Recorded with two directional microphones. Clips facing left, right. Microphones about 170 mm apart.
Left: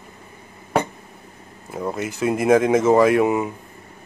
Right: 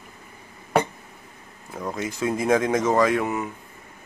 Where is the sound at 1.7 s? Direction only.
10° left (ahead or behind).